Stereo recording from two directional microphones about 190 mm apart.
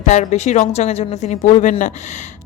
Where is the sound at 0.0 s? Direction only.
40° left (ahead or behind).